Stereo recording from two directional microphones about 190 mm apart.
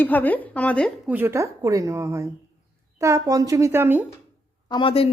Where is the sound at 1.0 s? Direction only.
10° right (ahead or behind).